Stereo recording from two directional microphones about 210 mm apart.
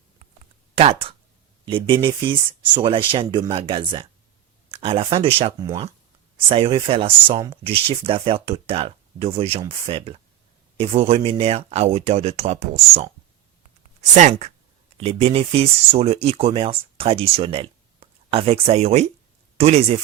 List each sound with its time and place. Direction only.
0.8 s speech: 25° right (ahead or behind)